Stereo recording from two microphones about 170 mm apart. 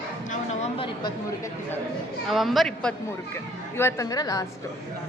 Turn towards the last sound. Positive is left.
turn(degrees=20)  # may be behind; listen again after turning